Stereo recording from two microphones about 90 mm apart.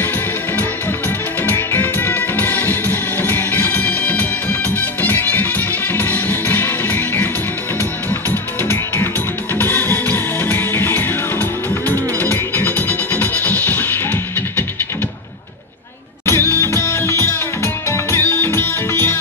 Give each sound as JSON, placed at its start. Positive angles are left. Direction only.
{"t": 1.4, "sound": "music", "side_deg": 20}
{"t": 16.3, "sound": "music", "side_deg": 25}